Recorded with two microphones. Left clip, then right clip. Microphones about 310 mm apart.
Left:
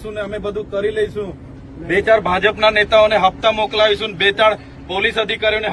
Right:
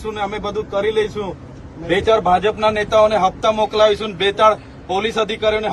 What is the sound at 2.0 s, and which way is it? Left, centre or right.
Speech, centre.